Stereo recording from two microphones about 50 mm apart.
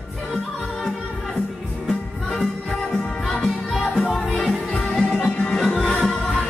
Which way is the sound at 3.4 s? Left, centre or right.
Centre.